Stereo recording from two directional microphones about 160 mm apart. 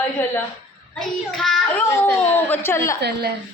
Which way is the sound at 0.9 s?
Centre (ahead or behind).